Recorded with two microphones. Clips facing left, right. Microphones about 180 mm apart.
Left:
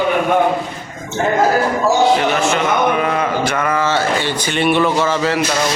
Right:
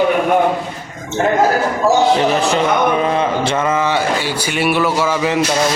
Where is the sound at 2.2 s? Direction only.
35° right (ahead or behind).